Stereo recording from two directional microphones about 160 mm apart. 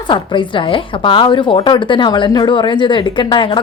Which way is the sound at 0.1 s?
30° left (ahead or behind).